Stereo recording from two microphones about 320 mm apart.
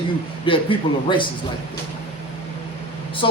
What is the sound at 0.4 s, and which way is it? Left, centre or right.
Speech, centre.